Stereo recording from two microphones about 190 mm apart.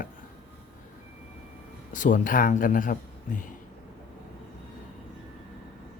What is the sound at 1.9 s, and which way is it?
Speech, 45° left (ahead or behind).